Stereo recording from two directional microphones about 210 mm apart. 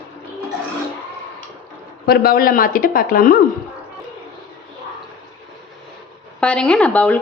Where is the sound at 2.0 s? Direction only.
45° left (ahead or behind).